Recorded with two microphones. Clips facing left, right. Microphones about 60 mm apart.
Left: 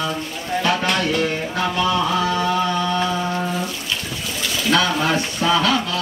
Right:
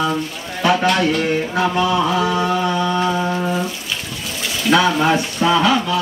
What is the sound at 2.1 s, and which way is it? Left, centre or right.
Mantra, centre.